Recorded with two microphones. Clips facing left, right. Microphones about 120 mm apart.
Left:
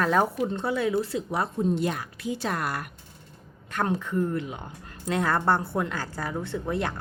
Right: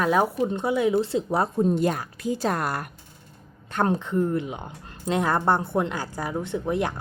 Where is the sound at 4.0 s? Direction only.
20° right (ahead or behind).